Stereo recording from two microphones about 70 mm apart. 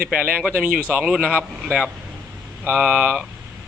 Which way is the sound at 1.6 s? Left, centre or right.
Centre.